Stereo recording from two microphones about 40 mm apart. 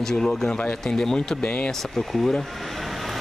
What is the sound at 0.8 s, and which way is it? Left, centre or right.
Speech, centre.